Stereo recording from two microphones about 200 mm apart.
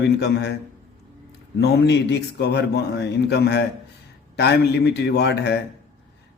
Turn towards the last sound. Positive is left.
turn(degrees=55)  # may be behind; listen again after turning